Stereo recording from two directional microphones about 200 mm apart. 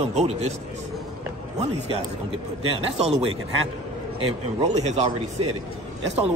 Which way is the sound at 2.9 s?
30° right (ahead or behind).